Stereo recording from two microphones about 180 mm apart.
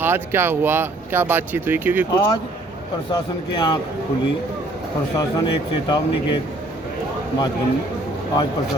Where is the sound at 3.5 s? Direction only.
25° left (ahead or behind).